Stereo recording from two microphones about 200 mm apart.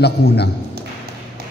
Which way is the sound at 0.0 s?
55° left (ahead or behind).